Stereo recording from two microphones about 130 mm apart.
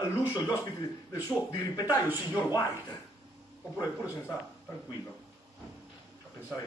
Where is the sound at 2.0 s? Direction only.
15° right (ahead or behind).